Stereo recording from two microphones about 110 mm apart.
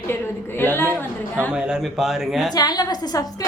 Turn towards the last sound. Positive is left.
turn(degrees=35)  # may be behind; listen again after turning